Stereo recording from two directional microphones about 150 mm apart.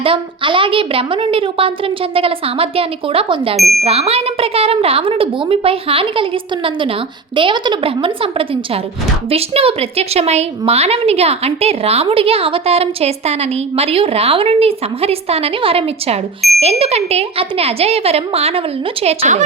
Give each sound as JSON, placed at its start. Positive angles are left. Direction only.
{"t": 0.0, "sound": "a woman's voice", "side_deg": -35}
{"t": 3.6, "sound": "speech", "side_deg": 0}
{"t": 3.8, "sound": "a woman's voice", "side_deg": -40}
{"t": 7.3, "sound": "a woman's voice", "side_deg": -30}